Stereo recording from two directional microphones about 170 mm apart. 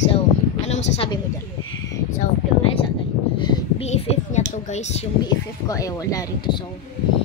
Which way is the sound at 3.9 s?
40° left (ahead or behind).